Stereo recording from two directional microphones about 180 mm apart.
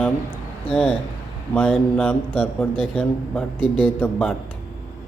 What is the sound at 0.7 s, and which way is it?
Speech, 30° left (ahead or behind).